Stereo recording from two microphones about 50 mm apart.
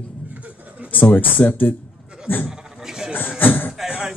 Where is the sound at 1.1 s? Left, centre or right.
Left.